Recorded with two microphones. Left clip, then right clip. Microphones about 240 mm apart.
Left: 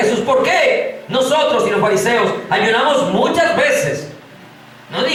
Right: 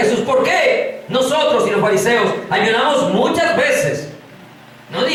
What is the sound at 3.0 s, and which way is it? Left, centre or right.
Speech, right.